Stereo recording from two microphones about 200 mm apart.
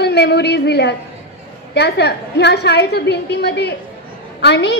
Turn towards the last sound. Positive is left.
turn(degrees=55)  # may be behind; listen again after turning